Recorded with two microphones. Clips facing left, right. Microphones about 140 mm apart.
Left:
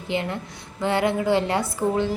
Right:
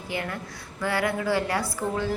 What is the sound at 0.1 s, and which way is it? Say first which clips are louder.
A woman's voice: left 5 dB; 20° left (ahead or behind).